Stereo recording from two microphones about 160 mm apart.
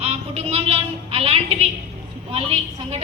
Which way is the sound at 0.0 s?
40° right (ahead or behind).